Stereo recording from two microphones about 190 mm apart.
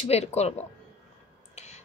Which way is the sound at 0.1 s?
35° left (ahead or behind).